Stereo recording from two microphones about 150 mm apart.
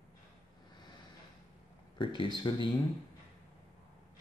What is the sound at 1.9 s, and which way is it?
Speech, 30° left (ahead or behind).